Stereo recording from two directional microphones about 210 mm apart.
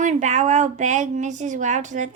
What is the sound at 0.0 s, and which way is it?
A woman's voice, 35° right (ahead or behind).